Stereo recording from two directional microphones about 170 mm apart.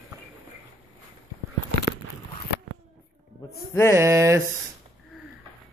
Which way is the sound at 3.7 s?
15° left (ahead or behind).